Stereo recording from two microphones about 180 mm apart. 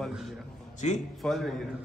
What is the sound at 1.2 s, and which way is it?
Speech, centre (ahead or behind).